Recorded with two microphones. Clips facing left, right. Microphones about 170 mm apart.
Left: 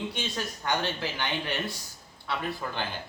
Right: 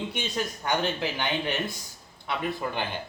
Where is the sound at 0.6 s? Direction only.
15° right (ahead or behind).